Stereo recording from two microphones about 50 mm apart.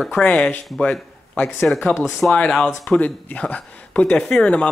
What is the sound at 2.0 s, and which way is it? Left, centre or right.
Speech, centre.